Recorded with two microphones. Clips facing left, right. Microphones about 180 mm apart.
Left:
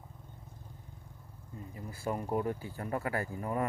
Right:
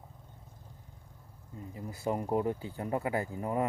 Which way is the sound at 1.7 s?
20° right (ahead or behind).